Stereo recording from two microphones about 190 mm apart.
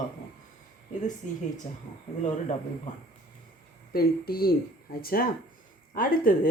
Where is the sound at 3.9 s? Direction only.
55° left (ahead or behind).